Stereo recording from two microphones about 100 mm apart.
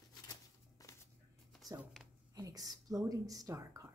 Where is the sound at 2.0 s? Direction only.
Centre (ahead or behind).